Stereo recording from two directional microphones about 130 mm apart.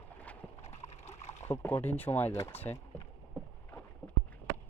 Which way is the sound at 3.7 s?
15° left (ahead or behind).